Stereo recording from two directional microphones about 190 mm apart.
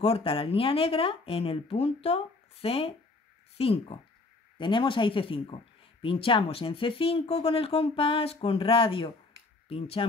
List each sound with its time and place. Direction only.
0.0 s speech: 30° left (ahead or behind)